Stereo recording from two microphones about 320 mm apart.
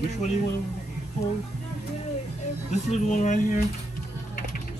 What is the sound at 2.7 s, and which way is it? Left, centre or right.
Speech, left.